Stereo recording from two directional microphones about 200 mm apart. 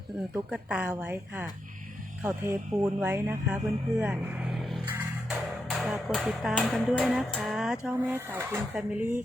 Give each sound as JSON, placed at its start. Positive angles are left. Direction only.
{"t": 0.3, "sound": "speech", "side_deg": -5}